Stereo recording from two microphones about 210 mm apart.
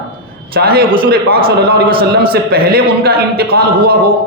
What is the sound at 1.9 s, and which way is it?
Speech, 25° right (ahead or behind).